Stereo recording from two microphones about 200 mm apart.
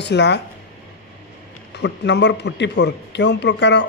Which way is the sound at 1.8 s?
60° left (ahead or behind).